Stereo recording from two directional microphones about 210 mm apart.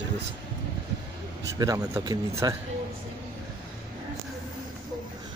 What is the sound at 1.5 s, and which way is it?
Speech, 15° right (ahead or behind).